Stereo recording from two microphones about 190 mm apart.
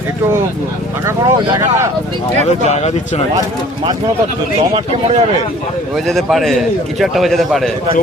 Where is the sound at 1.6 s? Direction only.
15° right (ahead or behind).